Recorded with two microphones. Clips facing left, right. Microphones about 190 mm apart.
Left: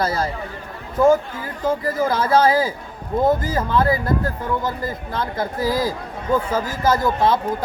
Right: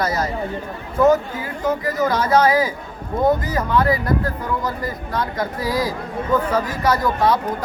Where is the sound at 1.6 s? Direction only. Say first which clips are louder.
Even; 30° left (ahead or behind).